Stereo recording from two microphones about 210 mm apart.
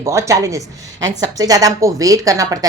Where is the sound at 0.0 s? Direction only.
15° right (ahead or behind).